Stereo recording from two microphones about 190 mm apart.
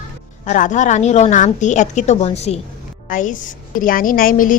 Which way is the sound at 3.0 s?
45° left (ahead or behind).